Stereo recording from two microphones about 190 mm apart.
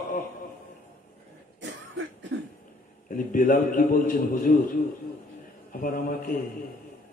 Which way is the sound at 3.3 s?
45° left (ahead or behind).